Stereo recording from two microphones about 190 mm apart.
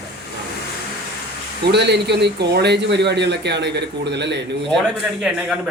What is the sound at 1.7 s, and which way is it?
Speech, 60° right (ahead or behind).